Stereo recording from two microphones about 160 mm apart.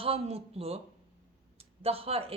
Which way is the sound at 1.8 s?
35° right (ahead or behind).